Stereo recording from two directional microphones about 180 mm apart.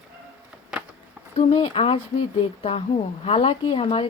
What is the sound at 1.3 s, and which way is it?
Speech, 30° left (ahead or behind).